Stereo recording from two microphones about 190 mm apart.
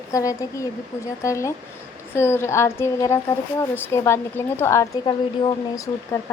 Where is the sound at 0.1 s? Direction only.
15° left (ahead or behind).